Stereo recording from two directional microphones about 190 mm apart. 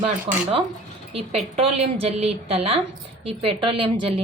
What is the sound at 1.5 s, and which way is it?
A woman's voice, 30° right (ahead or behind).